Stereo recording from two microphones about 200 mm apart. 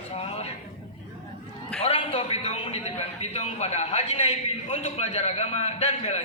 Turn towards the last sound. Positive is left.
turn(degrees=35)  # may be behind; listen again after turning